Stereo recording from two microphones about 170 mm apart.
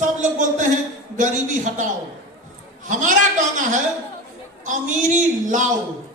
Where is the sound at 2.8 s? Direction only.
50° right (ahead or behind).